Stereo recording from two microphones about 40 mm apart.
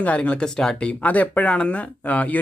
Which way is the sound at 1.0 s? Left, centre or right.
Left.